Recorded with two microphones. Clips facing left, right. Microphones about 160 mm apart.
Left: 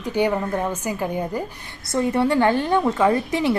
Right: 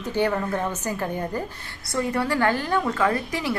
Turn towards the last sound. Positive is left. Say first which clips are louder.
# left 6 dB
turn(degrees=25)  # may be behind; listen again after turning